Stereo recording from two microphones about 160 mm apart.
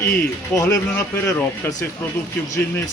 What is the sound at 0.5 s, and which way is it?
Speech, 20° left (ahead or behind).